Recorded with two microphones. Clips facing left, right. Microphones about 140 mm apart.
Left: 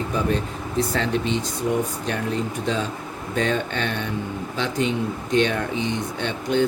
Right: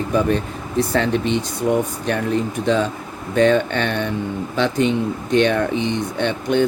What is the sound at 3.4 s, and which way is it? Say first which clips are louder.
Speech: right 8 dB; 65° right (ahead or behind).